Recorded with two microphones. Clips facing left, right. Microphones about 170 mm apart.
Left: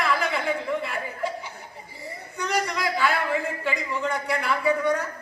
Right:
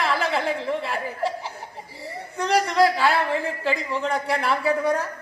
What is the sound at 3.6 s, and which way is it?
Speech, 30° right (ahead or behind).